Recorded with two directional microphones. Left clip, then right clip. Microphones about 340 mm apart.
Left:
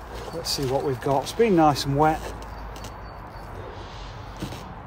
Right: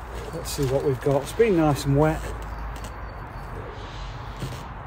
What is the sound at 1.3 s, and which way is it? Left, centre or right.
Speech, centre.